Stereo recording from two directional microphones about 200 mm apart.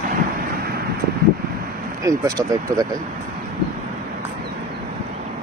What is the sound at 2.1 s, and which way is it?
Speech, 15° right (ahead or behind).